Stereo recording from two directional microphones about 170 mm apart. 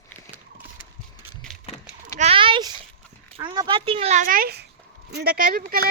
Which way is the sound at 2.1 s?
35° right (ahead or behind).